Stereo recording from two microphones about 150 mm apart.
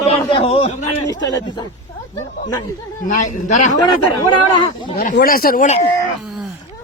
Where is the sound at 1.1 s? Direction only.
25° left (ahead or behind).